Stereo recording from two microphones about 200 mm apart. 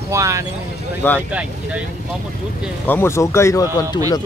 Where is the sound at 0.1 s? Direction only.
15° right (ahead or behind).